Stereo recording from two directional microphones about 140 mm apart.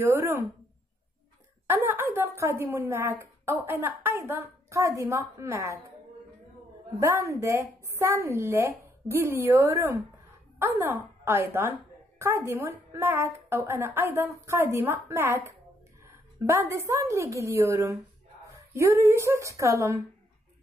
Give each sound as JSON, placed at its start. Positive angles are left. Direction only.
{"t": 0.0, "sound": "a woman's voice", "side_deg": -20}
{"t": 1.7, "sound": "speech", "side_deg": -15}
{"t": 7.0, "sound": "a woman's voice", "side_deg": -20}